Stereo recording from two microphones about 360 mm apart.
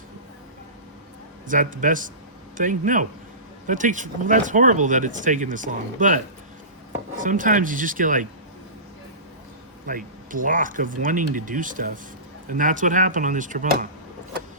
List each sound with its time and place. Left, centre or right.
1.5 s speech: right
9.8 s speech: right